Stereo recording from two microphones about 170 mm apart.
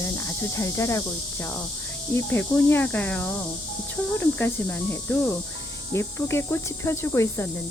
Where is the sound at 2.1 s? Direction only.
15° left (ahead or behind).